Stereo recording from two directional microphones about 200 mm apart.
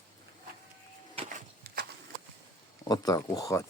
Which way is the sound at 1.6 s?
50° right (ahead or behind).